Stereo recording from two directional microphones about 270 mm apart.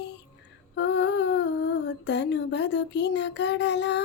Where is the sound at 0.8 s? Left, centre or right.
Left.